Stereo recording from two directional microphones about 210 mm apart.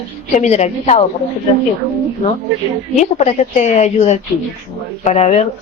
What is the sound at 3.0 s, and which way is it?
A woman's voice, 30° left (ahead or behind).